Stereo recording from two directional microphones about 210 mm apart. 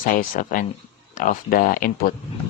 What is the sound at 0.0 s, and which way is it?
Speech, 40° left (ahead or behind).